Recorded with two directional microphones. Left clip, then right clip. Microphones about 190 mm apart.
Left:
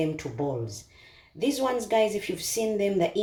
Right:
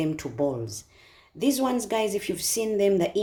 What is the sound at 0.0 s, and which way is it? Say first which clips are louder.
Speech: right 2 dB; 60° right (ahead or behind).